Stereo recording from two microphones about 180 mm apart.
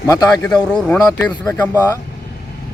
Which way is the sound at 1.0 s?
20° left (ahead or behind).